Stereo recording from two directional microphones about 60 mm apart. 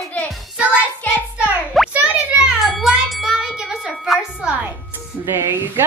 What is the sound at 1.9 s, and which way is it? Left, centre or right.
Music, right.